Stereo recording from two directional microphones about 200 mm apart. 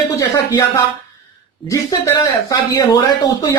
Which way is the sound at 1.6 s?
15° left (ahead or behind).